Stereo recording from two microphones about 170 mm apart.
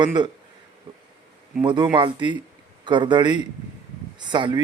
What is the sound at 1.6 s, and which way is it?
Speech, 25° right (ahead or behind).